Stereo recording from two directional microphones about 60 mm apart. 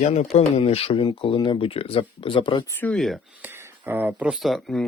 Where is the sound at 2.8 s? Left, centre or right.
Left.